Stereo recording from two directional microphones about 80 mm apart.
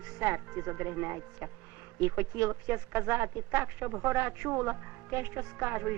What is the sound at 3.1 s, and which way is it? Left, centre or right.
Speech, right.